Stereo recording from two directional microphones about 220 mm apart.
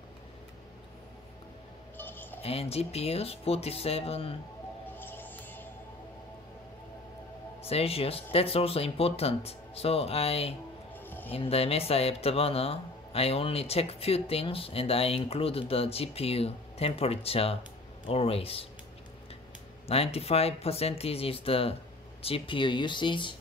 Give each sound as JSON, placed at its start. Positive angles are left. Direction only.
{"t": 2.0, "sound": "a sound", "side_deg": 10}
{"t": 2.4, "sound": "speech", "side_deg": 25}
{"t": 4.9, "sound": "music", "side_deg": 10}
{"t": 7.6, "sound": "speech", "side_deg": 25}
{"t": 11.0, "sound": "a sound", "side_deg": 10}
{"t": 11.2, "sound": "speech", "side_deg": 25}
{"t": 19.9, "sound": "speech", "side_deg": 25}